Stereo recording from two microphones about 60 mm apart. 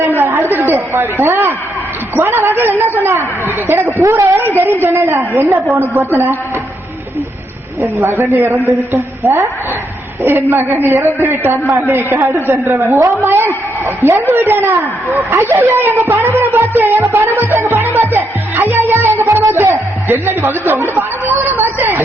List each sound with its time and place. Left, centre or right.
0.0 s a sound: right
1.2 s speech: right
4.0 s a woman's voice: right
4.4 s speech: right
6.1 s speech: right
7.8 s speech: right
10.2 s speech: right
12.5 s a woman's voice: right
16.2 s music: right
19.2 s speech: right
21.2 s speech: right